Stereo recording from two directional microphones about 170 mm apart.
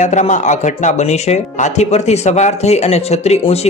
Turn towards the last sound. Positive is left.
turn(degrees=40)  # may be behind; listen again after turning